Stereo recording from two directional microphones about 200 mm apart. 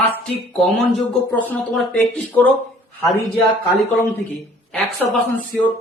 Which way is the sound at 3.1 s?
30° left (ahead or behind).